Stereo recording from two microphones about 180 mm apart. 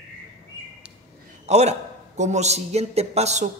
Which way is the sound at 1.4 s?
35° right (ahead or behind).